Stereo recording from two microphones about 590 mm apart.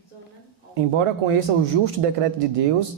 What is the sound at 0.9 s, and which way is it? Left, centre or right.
A man's voice, right.